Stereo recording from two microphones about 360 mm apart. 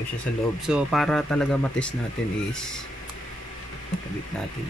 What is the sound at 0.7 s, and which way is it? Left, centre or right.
Speech, centre.